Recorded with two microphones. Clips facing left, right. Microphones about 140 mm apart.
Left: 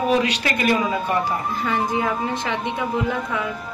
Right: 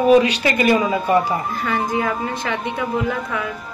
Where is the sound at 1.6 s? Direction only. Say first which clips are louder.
Right 1 dB; 20° left (ahead or behind).